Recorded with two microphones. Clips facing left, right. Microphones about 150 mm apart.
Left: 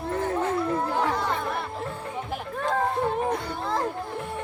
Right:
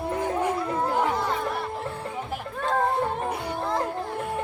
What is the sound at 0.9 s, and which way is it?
Chatter, 15° right (ahead or behind).